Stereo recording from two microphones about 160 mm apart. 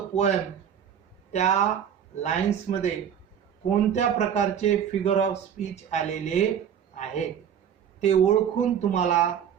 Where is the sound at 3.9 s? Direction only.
45° left (ahead or behind).